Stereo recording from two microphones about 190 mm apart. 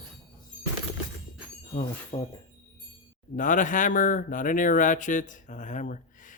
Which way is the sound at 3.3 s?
45° left (ahead or behind).